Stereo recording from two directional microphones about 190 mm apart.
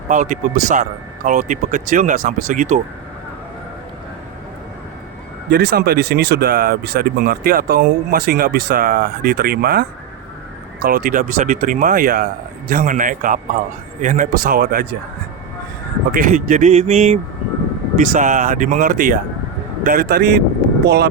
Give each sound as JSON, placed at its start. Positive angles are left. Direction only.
{"t": 0.1, "sound": "speech", "side_deg": -45}
{"t": 5.5, "sound": "speech", "side_deg": -55}
{"t": 10.8, "sound": "speech", "side_deg": -50}
{"t": 16.1, "sound": "speech", "side_deg": -45}